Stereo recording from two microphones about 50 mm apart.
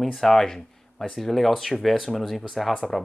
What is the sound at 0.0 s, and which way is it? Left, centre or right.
Speech, centre.